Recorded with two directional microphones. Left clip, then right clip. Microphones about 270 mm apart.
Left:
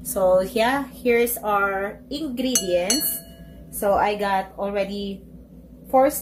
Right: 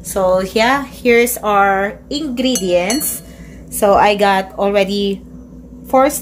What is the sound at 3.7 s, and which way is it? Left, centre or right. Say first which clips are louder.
A woman's voice: right 9 dB; right.